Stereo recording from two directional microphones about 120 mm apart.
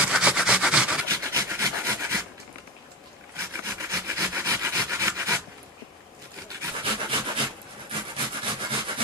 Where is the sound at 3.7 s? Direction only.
25° right (ahead or behind).